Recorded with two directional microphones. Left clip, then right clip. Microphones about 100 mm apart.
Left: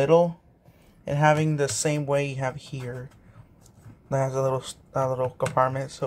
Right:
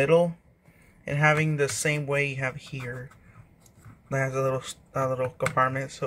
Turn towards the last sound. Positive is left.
turn(degrees=20)  # may be behind; listen again after turning